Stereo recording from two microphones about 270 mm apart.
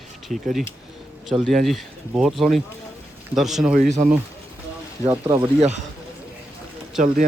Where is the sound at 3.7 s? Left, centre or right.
Right.